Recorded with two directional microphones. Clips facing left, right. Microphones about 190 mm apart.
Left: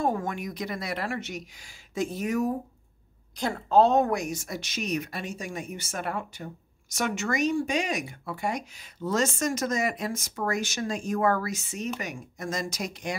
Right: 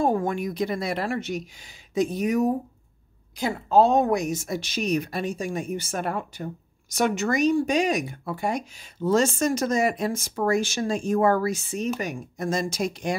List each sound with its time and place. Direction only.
0.0 s speech: 30° right (ahead or behind)
1.7 s speech: 15° right (ahead or behind)
3.3 s speech: 10° right (ahead or behind); by 13.1 s 30° right (ahead or behind)